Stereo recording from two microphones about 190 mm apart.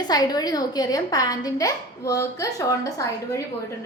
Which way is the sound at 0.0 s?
20° left (ahead or behind).